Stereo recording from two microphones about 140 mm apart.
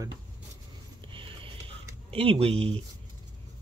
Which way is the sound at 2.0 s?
45° right (ahead or behind).